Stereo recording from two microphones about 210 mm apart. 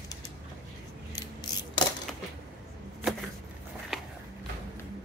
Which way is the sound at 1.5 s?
20° left (ahead or behind).